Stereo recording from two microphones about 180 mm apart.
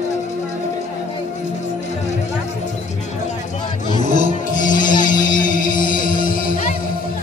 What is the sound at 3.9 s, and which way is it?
Music, 45° left (ahead or behind).